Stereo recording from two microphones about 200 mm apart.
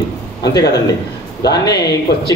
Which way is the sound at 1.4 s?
20° left (ahead or behind).